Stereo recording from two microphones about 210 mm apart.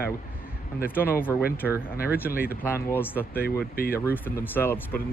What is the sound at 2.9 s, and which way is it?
Speech, 10° left (ahead or behind).